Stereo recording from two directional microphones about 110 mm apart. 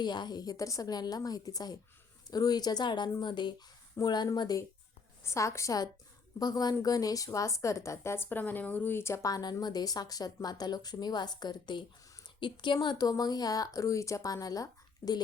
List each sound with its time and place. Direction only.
0.0 s a woman's voice: 40° left (ahead or behind)